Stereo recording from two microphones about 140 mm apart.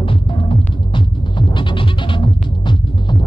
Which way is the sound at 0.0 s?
40° left (ahead or behind).